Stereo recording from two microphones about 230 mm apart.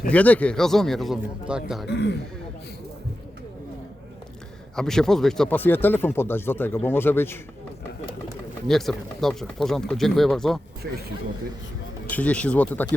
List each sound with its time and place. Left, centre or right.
0.1 s speech: centre
1.9 s speech: left
4.8 s speech: centre
8.6 s speech: centre
12.0 s speech: centre